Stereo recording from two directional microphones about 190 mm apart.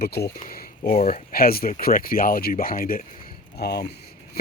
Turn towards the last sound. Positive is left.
turn(degrees=60)  # may be behind; listen again after turning